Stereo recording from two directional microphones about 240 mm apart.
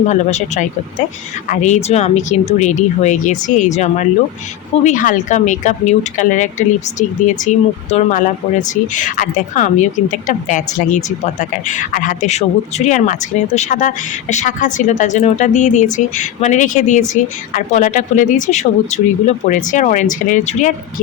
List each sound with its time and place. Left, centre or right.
0.1 s a woman's voice: left